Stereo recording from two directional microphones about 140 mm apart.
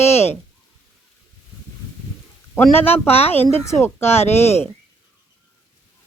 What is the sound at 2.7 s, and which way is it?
Speech, 15° left (ahead or behind).